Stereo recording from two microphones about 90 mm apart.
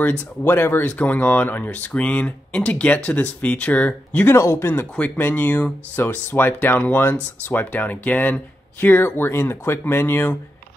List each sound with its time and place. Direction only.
0.0 s speech: 25° left (ahead or behind)
4.3 s speech: 30° left (ahead or behind)
4.9 s speech: 15° left (ahead or behind)